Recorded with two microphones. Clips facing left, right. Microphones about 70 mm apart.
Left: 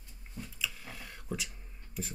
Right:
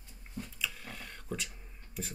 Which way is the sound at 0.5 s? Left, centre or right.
Centre.